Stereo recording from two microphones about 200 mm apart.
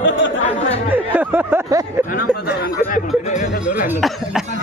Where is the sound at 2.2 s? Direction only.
45° left (ahead or behind).